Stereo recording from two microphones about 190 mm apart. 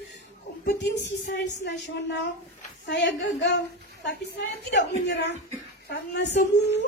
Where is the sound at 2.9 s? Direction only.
65° left (ahead or behind).